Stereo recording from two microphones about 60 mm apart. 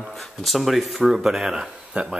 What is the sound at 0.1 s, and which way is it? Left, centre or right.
Speech, centre.